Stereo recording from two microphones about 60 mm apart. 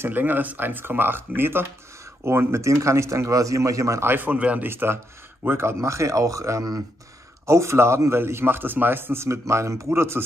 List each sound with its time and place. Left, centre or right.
0.0 s speech: right
4.0 s speech: right
4.3 s speech: right
4.6 s speech: right
7.4 s speech: right